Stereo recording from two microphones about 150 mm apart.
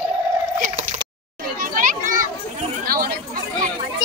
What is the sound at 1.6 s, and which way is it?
Children playing, 65° right (ahead or behind).